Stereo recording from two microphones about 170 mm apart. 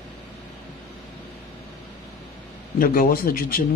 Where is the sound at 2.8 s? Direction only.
55° left (ahead or behind).